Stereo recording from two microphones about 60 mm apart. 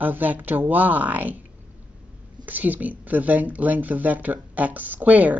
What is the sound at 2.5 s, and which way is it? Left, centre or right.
Speech, right.